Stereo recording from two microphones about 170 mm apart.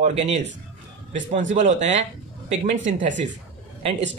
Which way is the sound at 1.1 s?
45° right (ahead or behind).